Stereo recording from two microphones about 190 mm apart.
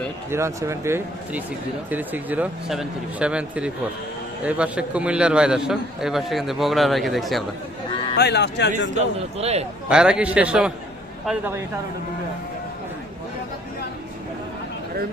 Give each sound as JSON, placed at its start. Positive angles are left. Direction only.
{"t": 0.3, "sound": "a man's voice", "side_deg": -15}
{"t": 8.2, "sound": "speech", "side_deg": 65}
{"t": 9.0, "sound": "a man's voice", "side_deg": -35}
{"t": 9.9, "sound": "a man's voice", "side_deg": -5}